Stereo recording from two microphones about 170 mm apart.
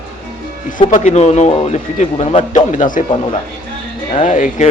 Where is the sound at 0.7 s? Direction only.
45° left (ahead or behind).